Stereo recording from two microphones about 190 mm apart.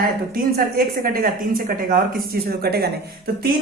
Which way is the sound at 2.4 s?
55° right (ahead or behind).